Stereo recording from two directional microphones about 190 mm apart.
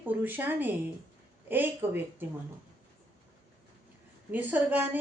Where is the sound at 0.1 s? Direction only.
10° right (ahead or behind).